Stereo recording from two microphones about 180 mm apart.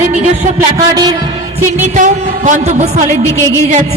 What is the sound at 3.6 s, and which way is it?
Speech, 35° right (ahead or behind).